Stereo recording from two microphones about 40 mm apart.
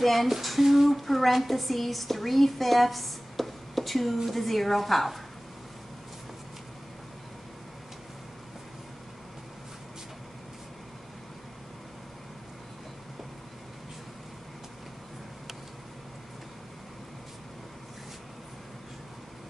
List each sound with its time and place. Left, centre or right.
0.0 s speech: centre